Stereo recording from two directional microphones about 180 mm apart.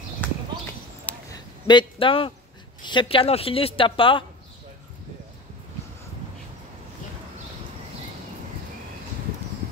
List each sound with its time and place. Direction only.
0.2 s clip-clop: 10° left (ahead or behind)
1.1 s a sound: 10° left (ahead or behind)
1.7 s a woman's voice: 25° left (ahead or behind)